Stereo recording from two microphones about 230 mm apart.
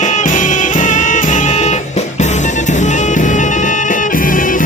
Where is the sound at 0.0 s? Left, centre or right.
Left.